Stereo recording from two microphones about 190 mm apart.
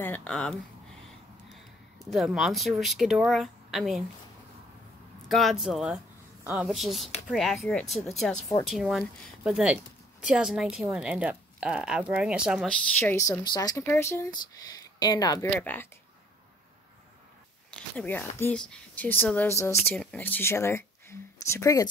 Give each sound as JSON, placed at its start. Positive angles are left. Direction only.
{"t": 0.0, "sound": "speech", "side_deg": 10}
{"t": 5.3, "sound": "speech", "side_deg": 0}
{"t": 12.9, "sound": "speech", "side_deg": 15}
{"t": 17.6, "sound": "speech", "side_deg": 5}